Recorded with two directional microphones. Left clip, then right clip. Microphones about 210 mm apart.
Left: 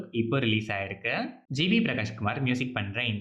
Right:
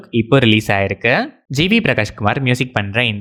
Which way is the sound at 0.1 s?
50° right (ahead or behind).